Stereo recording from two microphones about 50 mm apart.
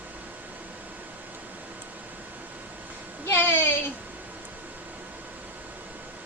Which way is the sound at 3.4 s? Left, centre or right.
Left.